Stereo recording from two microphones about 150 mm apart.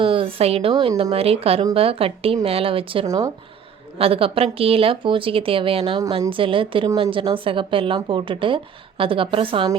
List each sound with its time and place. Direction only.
0.0 s a woman's voice: 35° right (ahead or behind)
3.1 s speech: 25° right (ahead or behind)
3.9 s a woman's voice: 40° right (ahead or behind)